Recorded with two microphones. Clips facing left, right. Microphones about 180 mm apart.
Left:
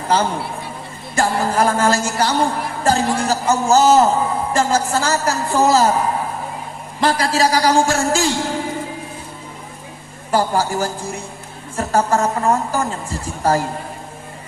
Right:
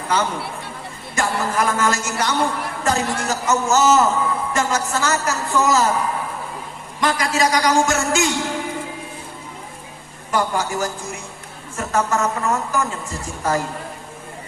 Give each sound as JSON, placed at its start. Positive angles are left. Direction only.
{"t": 1.1, "sound": "a man's voice", "side_deg": 35}
{"t": 10.3, "sound": "a man's voice", "side_deg": 35}